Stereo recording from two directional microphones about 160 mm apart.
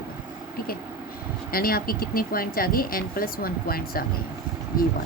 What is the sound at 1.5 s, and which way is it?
A woman's voice, 65° left (ahead or behind).